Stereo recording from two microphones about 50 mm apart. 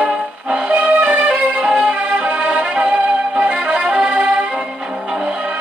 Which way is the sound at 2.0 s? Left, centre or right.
Right.